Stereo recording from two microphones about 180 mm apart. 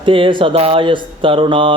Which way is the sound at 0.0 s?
30° right (ahead or behind).